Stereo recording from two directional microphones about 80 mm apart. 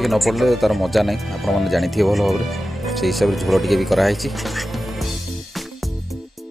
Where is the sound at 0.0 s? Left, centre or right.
Centre.